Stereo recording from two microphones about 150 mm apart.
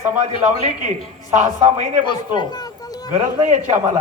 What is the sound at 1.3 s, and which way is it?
Speech, 55° right (ahead or behind).